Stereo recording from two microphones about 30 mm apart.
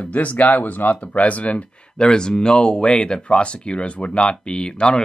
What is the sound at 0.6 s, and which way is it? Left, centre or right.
Speech, left.